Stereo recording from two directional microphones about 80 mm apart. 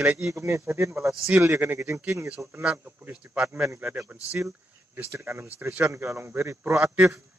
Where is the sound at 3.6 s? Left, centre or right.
Right.